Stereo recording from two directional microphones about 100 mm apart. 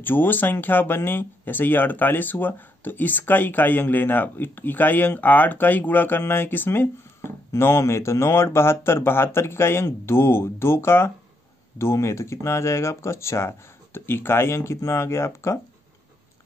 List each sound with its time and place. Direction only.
0.0 s speech: 20° left (ahead or behind)